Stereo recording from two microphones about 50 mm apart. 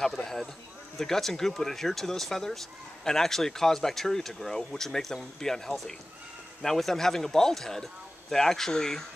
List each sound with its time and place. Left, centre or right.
0.0 s speech: centre